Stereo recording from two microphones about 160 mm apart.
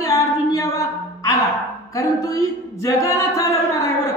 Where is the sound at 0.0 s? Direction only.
20° left (ahead or behind).